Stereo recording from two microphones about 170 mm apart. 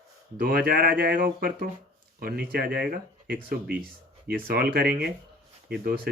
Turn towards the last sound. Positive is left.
turn(degrees=-60)  # may be behind; listen again after turning